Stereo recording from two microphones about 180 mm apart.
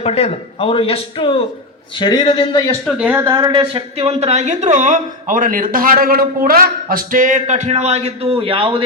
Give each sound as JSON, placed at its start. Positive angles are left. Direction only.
{"t": 0.0, "sound": "a man's voice", "side_deg": 35}
{"t": 2.8, "sound": "speech", "side_deg": -5}
{"t": 3.2, "sound": "speech", "side_deg": -20}